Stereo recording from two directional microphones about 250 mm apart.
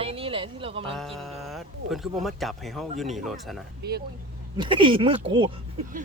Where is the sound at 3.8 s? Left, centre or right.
Right.